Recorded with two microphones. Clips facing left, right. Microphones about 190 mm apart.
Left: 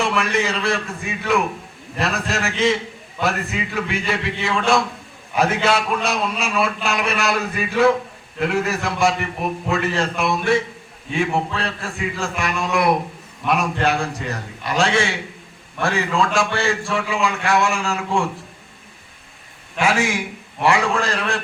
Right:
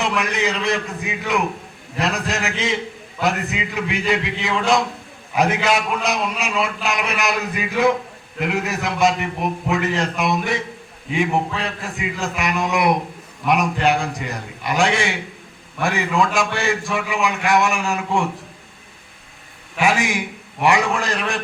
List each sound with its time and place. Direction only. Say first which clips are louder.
0.0 s a man's voice: left 1 dB; 20° right (ahead or behind)
19.8 s a man's voice: even; 15° right (ahead or behind)